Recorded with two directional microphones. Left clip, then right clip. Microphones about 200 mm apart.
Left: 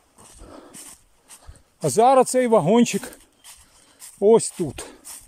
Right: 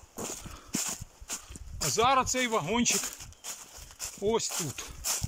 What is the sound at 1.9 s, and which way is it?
Speech, 45° left (ahead or behind).